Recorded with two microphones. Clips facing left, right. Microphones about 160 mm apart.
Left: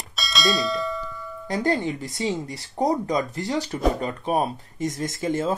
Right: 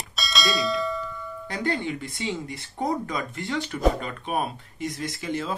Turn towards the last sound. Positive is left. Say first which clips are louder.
# left 5 dB
turn(degrees=45)  # may be behind; listen again after turning